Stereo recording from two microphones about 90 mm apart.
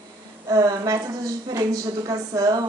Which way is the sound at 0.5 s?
40° right (ahead or behind).